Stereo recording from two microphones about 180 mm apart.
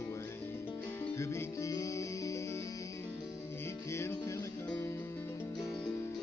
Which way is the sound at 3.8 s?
15° left (ahead or behind).